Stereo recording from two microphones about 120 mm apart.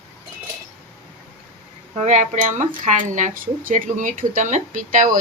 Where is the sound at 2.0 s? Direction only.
90° right.